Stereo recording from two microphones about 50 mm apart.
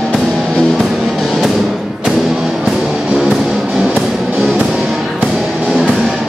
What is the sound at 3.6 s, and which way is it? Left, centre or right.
Music, centre.